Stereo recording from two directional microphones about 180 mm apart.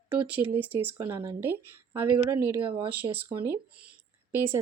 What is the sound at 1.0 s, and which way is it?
Speech, 20° right (ahead or behind).